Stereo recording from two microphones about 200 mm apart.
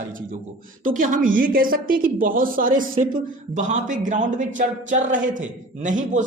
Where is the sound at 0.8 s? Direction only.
40° right (ahead or behind).